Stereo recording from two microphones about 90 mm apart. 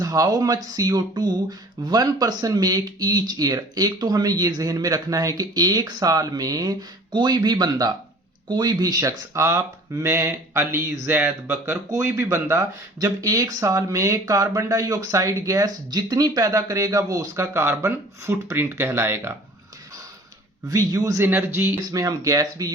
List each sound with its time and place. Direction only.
0.0 s speech: 45° right (ahead or behind)
20.7 s speech: 40° right (ahead or behind)
21.2 s speech: 25° right (ahead or behind)
22.0 s speech: 40° right (ahead or behind)